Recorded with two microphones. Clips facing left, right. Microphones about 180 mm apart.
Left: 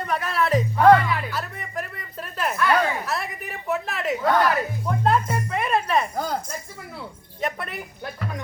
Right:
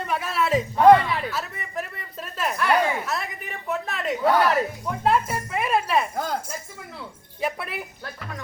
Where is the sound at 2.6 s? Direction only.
20° right (ahead or behind).